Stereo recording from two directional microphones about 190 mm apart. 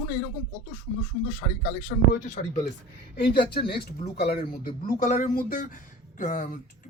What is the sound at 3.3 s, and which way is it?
Speech, 55° left (ahead or behind).